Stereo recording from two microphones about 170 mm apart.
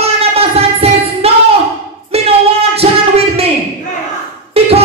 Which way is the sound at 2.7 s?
35° right (ahead or behind).